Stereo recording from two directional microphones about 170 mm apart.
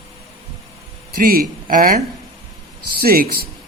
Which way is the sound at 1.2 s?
60° right (ahead or behind).